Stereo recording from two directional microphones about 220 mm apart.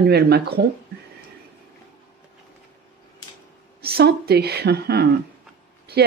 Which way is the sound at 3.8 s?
45° right (ahead or behind).